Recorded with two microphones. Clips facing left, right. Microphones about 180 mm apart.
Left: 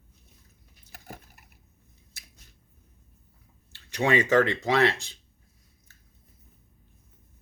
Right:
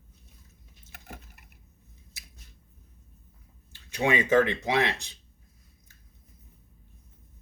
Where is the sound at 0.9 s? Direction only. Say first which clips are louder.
Left 2 dB; 35° left (ahead or behind).